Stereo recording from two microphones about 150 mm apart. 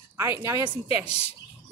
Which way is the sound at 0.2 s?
20° right (ahead or behind).